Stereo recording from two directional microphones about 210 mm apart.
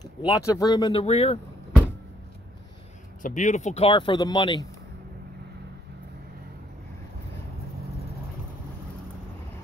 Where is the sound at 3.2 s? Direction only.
35° left (ahead or behind).